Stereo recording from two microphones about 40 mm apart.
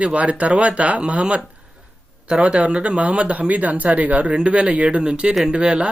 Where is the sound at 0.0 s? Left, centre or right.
Right.